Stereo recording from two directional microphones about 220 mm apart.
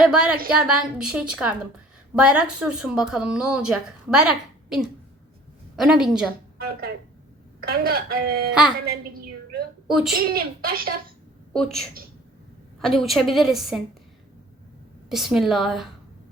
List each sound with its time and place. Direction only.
0.0 s a woman's voice: 5° right (ahead or behind)
6.6 s speech: 45° right (ahead or behind)
9.8 s a woman's voice: centre (ahead or behind)
10.2 s speech: 45° right (ahead or behind)
11.5 s speech: centre (ahead or behind)
15.1 s speech: centre (ahead or behind)